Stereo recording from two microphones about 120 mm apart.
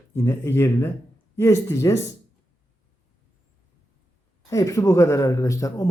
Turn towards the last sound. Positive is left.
turn(degrees=30)  # may be behind; listen again after turning